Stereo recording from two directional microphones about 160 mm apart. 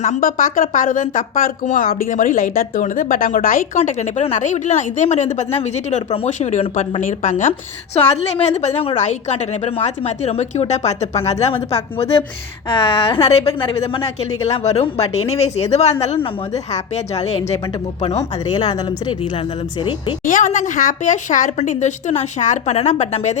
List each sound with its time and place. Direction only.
0.0 s speech: 55° left (ahead or behind)
3.8 s a woman's voice: 45° left (ahead or behind)
18.5 s speech: 25° left (ahead or behind)
20.2 s a woman's voice: 50° left (ahead or behind)